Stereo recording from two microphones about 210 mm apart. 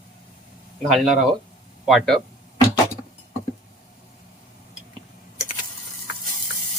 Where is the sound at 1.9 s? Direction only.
Centre (ahead or behind).